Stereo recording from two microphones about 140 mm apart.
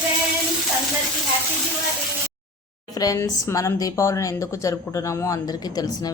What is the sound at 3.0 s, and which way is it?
A woman's voice, 25° left (ahead or behind).